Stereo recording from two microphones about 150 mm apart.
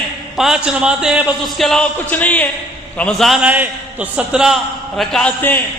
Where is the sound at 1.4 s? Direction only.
Centre (ahead or behind).